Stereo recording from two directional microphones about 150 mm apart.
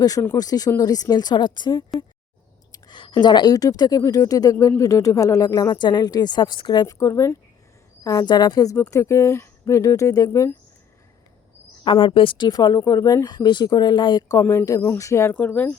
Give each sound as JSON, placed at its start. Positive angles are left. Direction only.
{"t": 0.0, "sound": "a woman's voice", "side_deg": 20}
{"t": 11.9, "sound": "speech", "side_deg": 35}